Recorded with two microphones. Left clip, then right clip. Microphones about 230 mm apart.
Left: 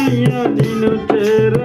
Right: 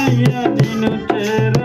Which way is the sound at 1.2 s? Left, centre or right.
Centre.